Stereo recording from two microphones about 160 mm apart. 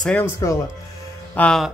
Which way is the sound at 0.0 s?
10° left (ahead or behind).